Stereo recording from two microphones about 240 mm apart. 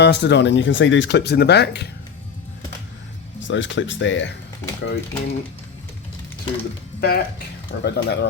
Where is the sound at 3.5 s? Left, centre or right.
Left.